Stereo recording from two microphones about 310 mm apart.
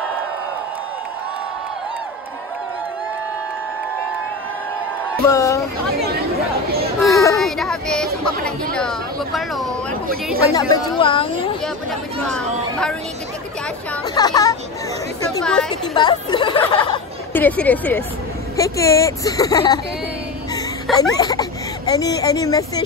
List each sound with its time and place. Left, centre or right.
5.2 s speech: centre
7.1 s child singing: centre
8.5 s speech: centre
12.3 s speech: centre
14.0 s speech: centre
16.0 s speech: centre
21.0 s speech: centre